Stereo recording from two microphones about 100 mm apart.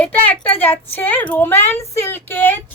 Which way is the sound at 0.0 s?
15° left (ahead or behind).